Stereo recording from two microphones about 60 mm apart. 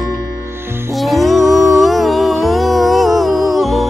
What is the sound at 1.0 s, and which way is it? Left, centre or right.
Music, centre.